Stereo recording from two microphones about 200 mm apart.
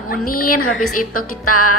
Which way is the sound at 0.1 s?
45° left (ahead or behind).